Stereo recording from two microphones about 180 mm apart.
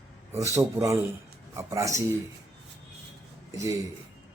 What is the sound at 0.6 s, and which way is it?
Speech, 15° right (ahead or behind).